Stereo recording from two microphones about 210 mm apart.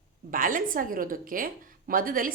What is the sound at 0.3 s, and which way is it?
A woman's voice, 40° right (ahead or behind).